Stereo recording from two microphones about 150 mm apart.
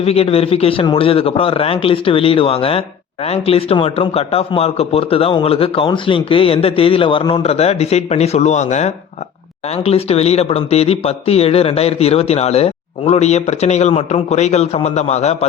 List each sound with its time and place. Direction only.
0.0 s speech: 40° left (ahead or behind)